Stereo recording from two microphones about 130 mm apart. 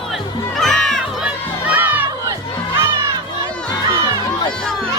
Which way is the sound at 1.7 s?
15° right (ahead or behind).